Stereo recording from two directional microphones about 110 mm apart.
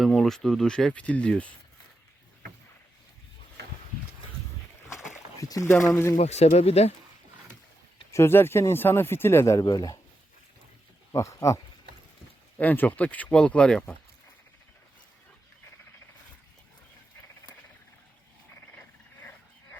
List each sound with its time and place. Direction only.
0.0 s speech: 5° left (ahead or behind)
5.4 s speech: 30° left (ahead or behind)
6.1 s speech: 85° left
8.1 s speech: 20° left (ahead or behind)
11.1 s speech: 30° left (ahead or behind)
12.5 s speech: 15° left (ahead or behind)